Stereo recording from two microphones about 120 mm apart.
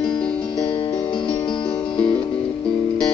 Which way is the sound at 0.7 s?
45° left (ahead or behind).